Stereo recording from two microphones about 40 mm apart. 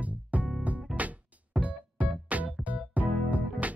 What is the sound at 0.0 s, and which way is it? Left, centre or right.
Music, right.